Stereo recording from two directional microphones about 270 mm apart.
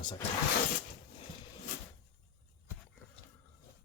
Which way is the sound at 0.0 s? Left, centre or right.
Centre.